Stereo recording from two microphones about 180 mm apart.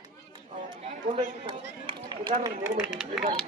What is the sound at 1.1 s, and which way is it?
A man's voice, 30° right (ahead or behind).